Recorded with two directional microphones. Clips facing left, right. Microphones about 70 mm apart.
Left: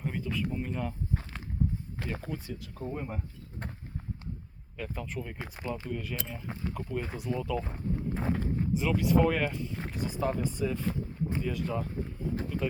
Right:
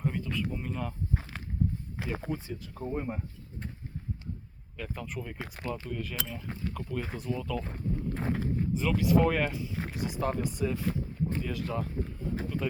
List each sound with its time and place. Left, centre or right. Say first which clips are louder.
0.0 s speech: right 1 dB; centre
2.1 s speech: right 3 dB; centre
4.8 s speech: left 1 dB; centre
5.7 s speech: left 1 dB; centre
10.4 s speech: even; centre
10.7 s speech: right 1 dB; centre
11.3 s a sound: left 1 dB; centre